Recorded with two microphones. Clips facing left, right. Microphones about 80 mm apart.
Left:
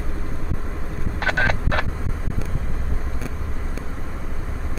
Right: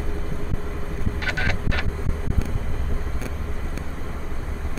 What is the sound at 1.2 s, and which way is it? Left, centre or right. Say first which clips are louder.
Vehicle: left 6 dB; left.